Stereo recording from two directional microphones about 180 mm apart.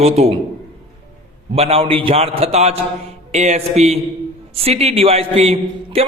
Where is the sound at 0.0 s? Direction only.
35° right (ahead or behind).